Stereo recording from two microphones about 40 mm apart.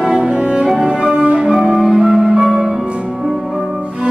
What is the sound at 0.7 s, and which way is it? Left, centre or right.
Cello, centre.